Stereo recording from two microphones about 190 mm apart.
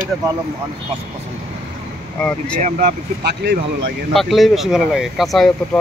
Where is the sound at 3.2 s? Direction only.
55° right (ahead or behind).